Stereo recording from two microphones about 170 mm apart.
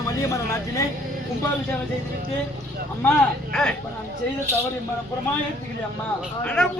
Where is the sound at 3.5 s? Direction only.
Centre (ahead or behind).